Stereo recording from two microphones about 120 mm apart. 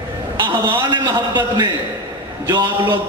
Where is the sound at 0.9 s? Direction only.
35° right (ahead or behind).